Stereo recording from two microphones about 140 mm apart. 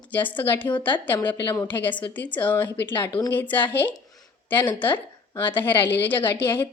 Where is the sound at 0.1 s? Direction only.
10° left (ahead or behind).